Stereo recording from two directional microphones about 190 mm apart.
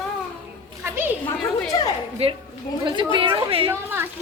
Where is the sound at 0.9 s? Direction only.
10° right (ahead or behind).